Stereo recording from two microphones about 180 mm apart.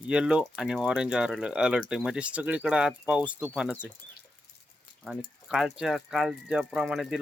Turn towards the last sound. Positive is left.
turn(degrees=-5)  # may be behind; listen again after turning